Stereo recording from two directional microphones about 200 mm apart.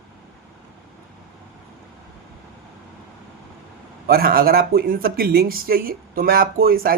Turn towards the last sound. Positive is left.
turn(degrees=-50)  # may be behind; listen again after turning